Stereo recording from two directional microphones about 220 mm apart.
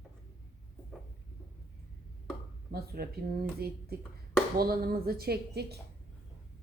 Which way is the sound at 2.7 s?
45° right (ahead or behind).